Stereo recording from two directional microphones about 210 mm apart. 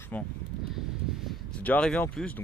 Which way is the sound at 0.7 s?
Centre (ahead or behind).